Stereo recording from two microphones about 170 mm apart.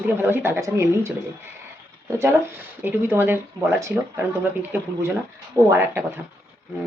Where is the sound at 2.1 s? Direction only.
15° right (ahead or behind).